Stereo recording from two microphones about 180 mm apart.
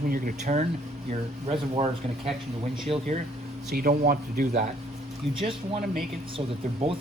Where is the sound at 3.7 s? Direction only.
55° right (ahead or behind).